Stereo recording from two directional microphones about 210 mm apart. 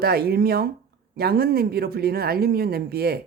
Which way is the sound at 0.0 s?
45° right (ahead or behind).